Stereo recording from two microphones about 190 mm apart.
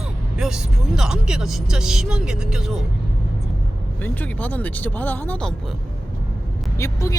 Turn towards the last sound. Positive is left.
turn(degrees=15)  # may be behind; listen again after turning